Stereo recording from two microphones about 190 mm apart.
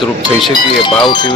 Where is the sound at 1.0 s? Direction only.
25° left (ahead or behind).